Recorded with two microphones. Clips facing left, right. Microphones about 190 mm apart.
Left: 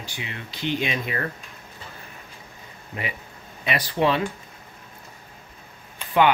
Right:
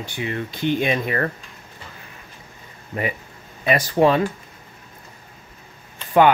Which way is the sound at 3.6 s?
45° right (ahead or behind).